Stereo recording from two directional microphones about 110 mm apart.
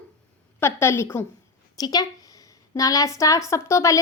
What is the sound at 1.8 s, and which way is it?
A woman's voice, 35° left (ahead or behind).